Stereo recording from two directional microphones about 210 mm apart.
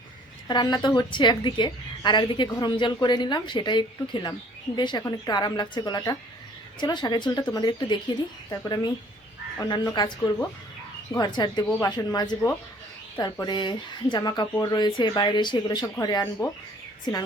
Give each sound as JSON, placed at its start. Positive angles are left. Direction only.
{"t": 0.4, "sound": "a woman's voice", "side_deg": 20}